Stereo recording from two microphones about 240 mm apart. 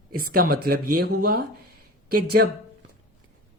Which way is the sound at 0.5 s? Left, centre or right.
Right.